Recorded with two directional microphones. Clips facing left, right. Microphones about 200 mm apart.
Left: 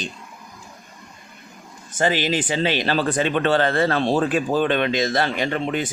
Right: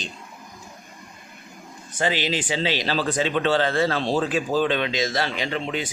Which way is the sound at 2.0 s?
50° left (ahead or behind).